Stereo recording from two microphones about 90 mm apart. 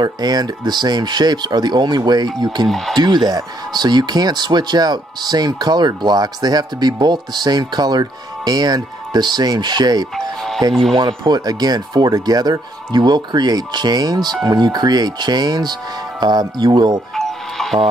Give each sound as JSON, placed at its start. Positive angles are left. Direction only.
{"t": 0.0, "sound": "speech", "side_deg": -50}
{"t": 2.7, "sound": "speech", "side_deg": 0}
{"t": 3.0, "sound": "speech", "side_deg": -50}
{"t": 10.7, "sound": "speech", "side_deg": 0}
{"t": 11.0, "sound": "speech", "side_deg": -55}
{"t": 17.1, "sound": "music", "side_deg": 5}